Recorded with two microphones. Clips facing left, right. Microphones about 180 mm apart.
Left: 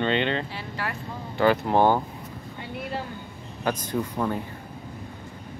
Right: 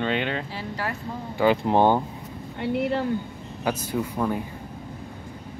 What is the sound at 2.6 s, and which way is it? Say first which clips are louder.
Speech: right 9 dB; 70° right (ahead or behind).